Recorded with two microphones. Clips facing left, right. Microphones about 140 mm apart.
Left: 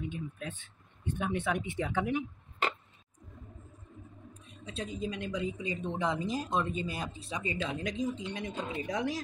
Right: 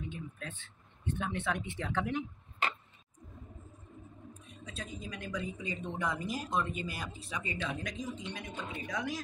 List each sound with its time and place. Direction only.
0.1 s speech: 15° left (ahead or behind)
4.6 s a woman's voice: 25° left (ahead or behind)